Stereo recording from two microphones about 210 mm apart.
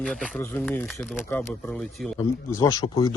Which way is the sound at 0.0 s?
5° left (ahead or behind).